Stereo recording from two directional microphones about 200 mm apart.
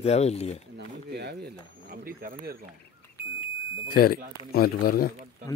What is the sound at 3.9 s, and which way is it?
Speech, 45° left (ahead or behind).